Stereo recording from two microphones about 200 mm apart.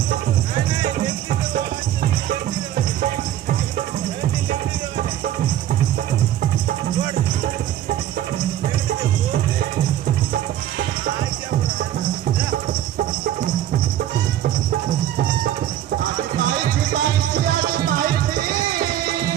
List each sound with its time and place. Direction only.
13.0 s music: 45° right (ahead or behind)
16.4 s music: 45° right (ahead or behind)